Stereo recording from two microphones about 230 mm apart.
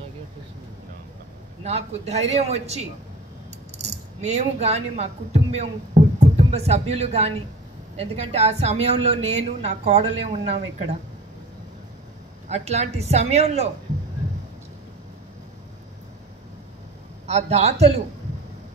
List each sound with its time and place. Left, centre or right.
1.6 s a woman's voice: right
12.4 s a woman's voice: right
17.3 s a woman's voice: right